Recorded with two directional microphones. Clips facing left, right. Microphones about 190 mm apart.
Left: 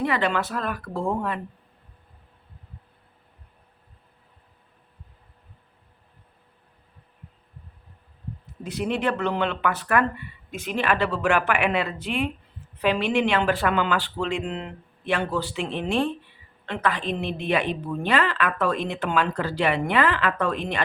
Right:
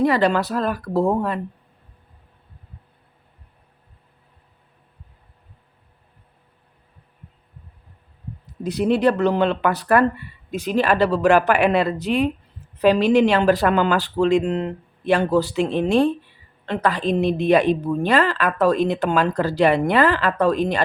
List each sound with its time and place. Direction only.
0.0 s a woman's voice: 40° right (ahead or behind)
8.4 s a woman's voice: 40° right (ahead or behind)